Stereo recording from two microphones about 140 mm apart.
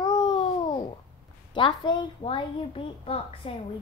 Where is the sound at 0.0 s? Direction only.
30° left (ahead or behind).